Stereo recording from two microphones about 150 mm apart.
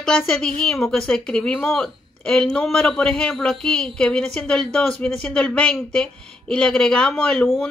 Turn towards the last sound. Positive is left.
turn(degrees=5)  # may be behind; listen again after turning